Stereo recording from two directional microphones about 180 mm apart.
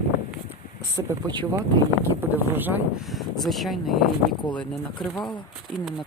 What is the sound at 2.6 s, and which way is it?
Speech, 10° right (ahead or behind).